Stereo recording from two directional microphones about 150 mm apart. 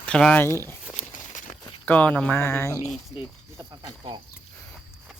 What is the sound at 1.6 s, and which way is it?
Speech, 10° left (ahead or behind).